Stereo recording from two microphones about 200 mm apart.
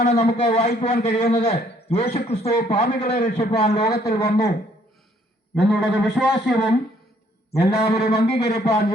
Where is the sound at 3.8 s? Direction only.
55° left (ahead or behind).